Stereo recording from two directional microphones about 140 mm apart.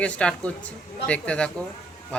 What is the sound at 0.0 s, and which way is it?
Speech, 10° left (ahead or behind).